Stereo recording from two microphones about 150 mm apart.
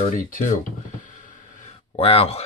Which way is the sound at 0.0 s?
60° left (ahead or behind).